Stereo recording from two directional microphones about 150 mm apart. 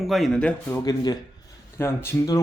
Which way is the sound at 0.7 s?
25° left (ahead or behind).